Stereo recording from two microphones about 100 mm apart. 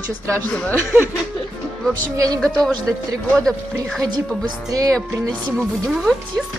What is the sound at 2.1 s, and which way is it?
Speech, 35° right (ahead or behind).